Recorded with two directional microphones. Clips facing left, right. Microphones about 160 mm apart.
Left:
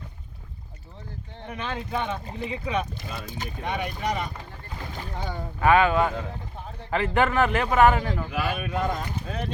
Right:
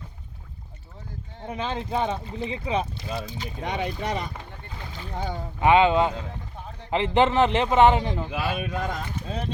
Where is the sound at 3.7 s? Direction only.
25° right (ahead or behind).